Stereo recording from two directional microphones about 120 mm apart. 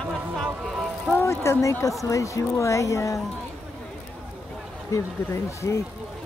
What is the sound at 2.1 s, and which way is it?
Speech, 25° left (ahead or behind).